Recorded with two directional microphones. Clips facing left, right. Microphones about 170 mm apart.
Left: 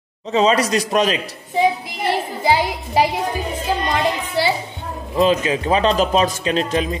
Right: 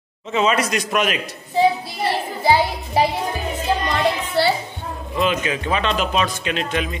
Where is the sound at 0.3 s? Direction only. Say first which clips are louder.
Left 3 dB; 35° left (ahead or behind).